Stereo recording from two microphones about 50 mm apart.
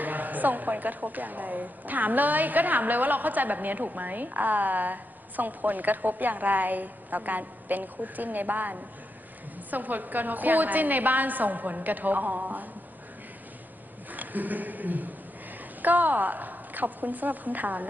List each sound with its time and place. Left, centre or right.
0.0 s a woman's voice: right
14.1 s a sound: right
15.8 s a woman's voice: right